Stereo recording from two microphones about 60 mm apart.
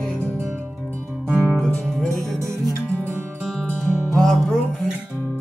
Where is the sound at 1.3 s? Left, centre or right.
Centre.